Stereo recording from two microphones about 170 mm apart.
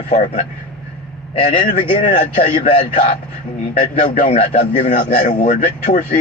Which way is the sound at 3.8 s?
45° left (ahead or behind).